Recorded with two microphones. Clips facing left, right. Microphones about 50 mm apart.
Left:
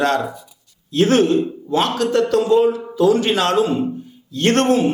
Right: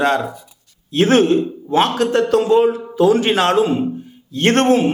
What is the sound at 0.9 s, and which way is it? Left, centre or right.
A man's voice, right.